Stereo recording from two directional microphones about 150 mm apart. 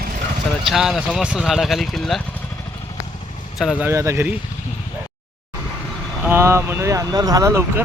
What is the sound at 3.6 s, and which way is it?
Speech, 5° right (ahead or behind).